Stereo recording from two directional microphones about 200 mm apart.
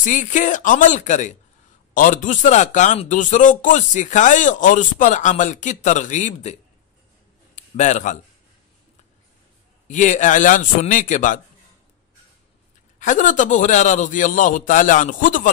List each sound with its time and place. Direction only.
0.0 s a man's voice: 40° left (ahead or behind)
9.8 s speech: 40° left (ahead or behind)
13.0 s speech: 40° left (ahead or behind)